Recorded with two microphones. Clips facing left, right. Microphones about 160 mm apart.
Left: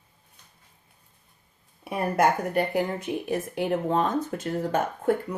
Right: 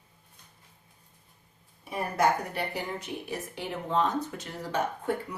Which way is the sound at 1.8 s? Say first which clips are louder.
Left 4 dB; 60° left (ahead or behind).